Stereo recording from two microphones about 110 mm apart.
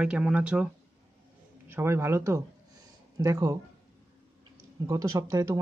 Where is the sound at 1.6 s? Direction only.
25° right (ahead or behind).